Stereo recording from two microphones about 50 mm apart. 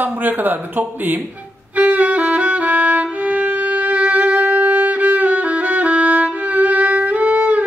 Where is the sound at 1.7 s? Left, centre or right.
Right.